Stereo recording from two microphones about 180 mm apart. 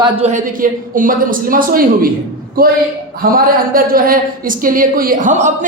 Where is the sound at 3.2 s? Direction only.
55° right (ahead or behind).